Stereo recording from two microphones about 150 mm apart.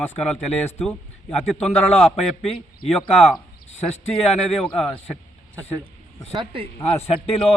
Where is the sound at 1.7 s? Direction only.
45° left (ahead or behind).